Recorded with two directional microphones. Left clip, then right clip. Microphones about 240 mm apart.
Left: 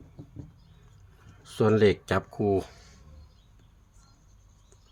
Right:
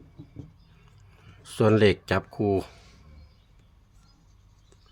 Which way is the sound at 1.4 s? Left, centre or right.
Centre.